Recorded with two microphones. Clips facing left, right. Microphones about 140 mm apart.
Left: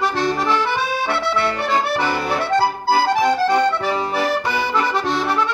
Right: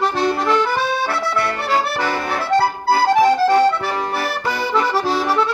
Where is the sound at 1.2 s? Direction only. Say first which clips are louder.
Left 1 dB; 25° left (ahead or behind).